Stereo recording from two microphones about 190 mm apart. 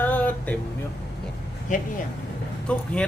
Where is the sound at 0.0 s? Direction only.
10° left (ahead or behind).